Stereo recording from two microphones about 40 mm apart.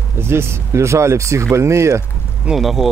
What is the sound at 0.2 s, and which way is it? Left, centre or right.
Speech, right.